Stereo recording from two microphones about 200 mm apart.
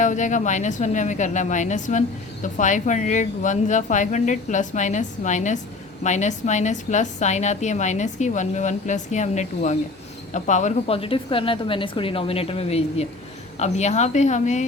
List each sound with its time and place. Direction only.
0.0 s a woman's voice: 40° left (ahead or behind)